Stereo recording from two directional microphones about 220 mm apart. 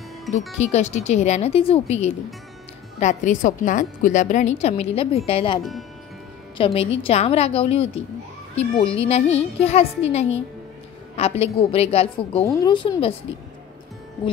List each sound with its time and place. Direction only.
0.6 s a woman's voice: 30° left (ahead or behind)
5.6 s speech: centre (ahead or behind)
6.6 s a child's voice: 25° left (ahead or behind)